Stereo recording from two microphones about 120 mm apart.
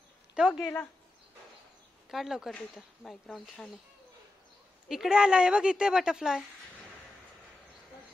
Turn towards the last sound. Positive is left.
turn(degrees=-5)  # may be behind; listen again after turning